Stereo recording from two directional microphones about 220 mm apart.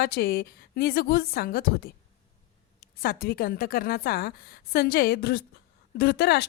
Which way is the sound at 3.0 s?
45° left (ahead or behind).